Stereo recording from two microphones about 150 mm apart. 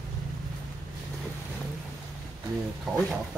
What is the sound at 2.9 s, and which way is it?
Speech, centre (ahead or behind).